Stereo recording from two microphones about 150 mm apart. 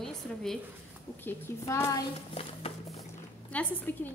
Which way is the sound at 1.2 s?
20° left (ahead or behind).